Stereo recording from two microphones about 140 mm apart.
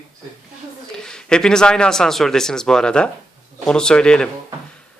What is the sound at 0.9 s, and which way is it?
Speech, 5° left (ahead or behind).